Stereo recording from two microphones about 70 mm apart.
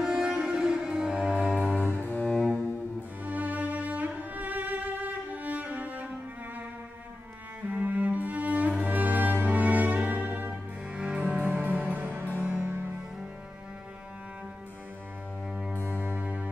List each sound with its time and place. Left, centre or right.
0.0 s music: centre
2.0 s cello: left
3.3 s music: right
7.6 s cello: right
10.5 s music: centre
15.7 s music: left
16.0 s music: right